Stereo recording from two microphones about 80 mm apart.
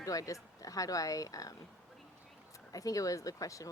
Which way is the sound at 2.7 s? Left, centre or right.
Left.